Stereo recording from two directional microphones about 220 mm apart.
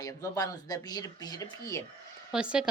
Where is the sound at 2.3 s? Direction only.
5° right (ahead or behind).